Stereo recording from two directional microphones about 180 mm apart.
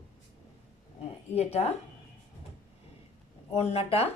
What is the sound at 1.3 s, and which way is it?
Speech, 35° left (ahead or behind).